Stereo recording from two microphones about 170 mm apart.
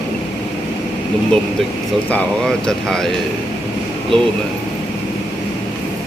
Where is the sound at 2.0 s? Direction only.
5° left (ahead or behind).